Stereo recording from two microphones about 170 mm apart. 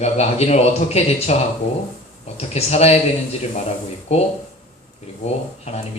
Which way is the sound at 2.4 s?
40° left (ahead or behind).